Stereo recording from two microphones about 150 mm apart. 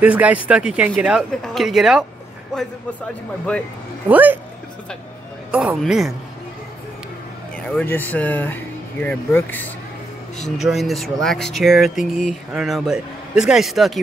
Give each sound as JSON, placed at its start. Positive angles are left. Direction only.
{"t": 0.0, "sound": "speech", "side_deg": -10}
{"t": 4.1, "sound": "speech", "side_deg": -10}
{"t": 5.5, "sound": "speech", "side_deg": -10}
{"t": 7.7, "sound": "speech", "side_deg": 15}
{"t": 10.6, "sound": "speech", "side_deg": 0}